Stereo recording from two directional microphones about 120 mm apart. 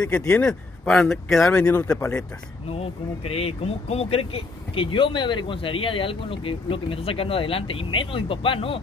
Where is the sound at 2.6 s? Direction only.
55° left (ahead or behind).